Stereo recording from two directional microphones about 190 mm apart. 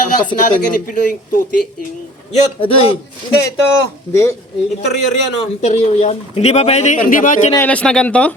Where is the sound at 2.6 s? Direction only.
30° left (ahead or behind).